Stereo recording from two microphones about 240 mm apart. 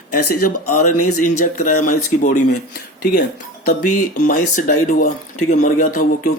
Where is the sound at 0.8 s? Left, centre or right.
Left.